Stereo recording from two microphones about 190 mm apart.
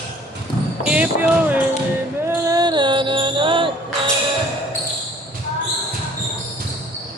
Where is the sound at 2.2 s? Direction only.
15° right (ahead or behind).